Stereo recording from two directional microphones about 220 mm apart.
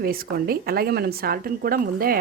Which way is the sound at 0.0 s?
45° right (ahead or behind).